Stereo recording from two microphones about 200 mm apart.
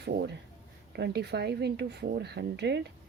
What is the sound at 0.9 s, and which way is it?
Speech, 55° right (ahead or behind).